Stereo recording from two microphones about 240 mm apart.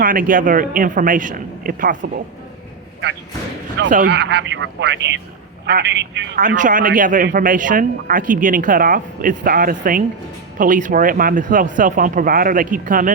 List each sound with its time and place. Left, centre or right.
0.0 s speech: right
4.0 s speech: right
6.6 s speech: right